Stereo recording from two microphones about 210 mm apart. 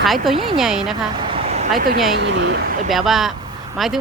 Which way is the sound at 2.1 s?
55° right (ahead or behind).